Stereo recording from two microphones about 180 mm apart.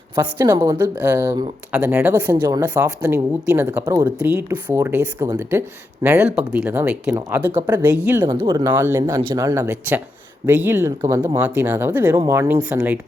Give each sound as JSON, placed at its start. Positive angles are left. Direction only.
{"t": 0.3, "sound": "a woman's voice", "side_deg": -20}
{"t": 8.4, "sound": "speech", "side_deg": -20}